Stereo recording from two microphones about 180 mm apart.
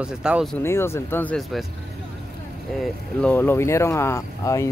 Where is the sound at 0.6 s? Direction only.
15° left (ahead or behind).